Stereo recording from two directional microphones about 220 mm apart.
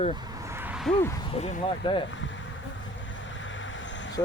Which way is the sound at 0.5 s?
5° right (ahead or behind).